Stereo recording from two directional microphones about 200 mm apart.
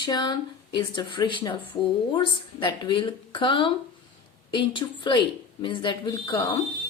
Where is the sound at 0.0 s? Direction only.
20° left (ahead or behind).